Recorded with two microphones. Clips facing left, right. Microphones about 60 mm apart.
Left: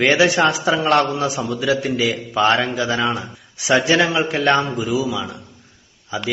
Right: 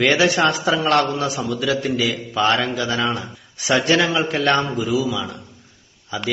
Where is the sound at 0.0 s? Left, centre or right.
Centre.